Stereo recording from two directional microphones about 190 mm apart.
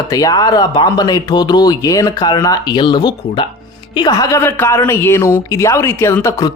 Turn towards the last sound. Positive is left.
turn(degrees=15)  # may be behind; listen again after turning